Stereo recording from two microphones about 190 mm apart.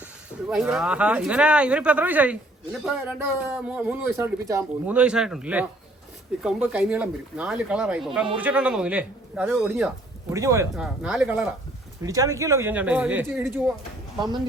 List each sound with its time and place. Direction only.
0.5 s speech: 5° right (ahead or behind)
4.9 s speech: 5° right (ahead or behind)
10.3 s speech: 15° right (ahead or behind)
10.8 s speech: 5° right (ahead or behind)
12.0 s speech: 15° right (ahead or behind)